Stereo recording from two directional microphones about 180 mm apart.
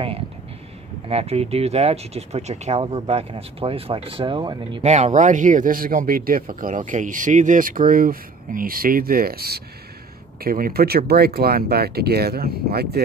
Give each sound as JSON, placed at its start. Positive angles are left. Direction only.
{"t": 1.0, "sound": "speech", "side_deg": -35}
{"t": 4.8, "sound": "speech", "side_deg": -40}